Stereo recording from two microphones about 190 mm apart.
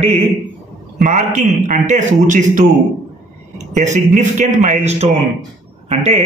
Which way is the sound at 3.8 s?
35° right (ahead or behind).